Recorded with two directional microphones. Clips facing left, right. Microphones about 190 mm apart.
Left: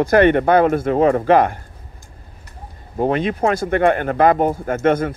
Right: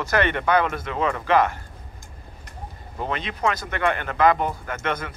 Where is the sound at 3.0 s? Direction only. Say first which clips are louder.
Left 9 dB; 50° left (ahead or behind).